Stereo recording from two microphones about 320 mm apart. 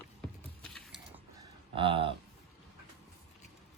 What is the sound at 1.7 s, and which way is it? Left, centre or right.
Speech, centre.